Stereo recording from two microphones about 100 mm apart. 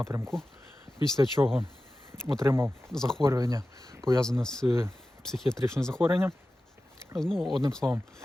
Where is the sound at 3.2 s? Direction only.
30° right (ahead or behind).